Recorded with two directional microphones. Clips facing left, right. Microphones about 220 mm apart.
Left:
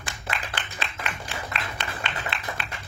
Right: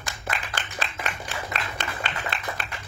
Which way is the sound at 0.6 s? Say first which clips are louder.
Right 2 dB; 45° right (ahead or behind).